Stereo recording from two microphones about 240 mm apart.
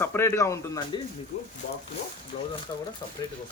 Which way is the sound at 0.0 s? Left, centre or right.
Centre.